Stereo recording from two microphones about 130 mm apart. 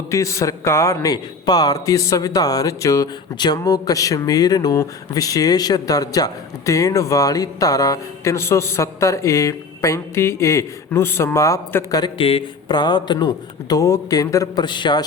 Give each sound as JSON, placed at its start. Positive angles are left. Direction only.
{"t": 0.1, "sound": "speech", "side_deg": 25}
{"t": 12.1, "sound": "speech", "side_deg": 45}